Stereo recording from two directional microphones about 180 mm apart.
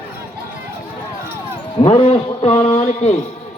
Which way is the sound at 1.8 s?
30° left (ahead or behind).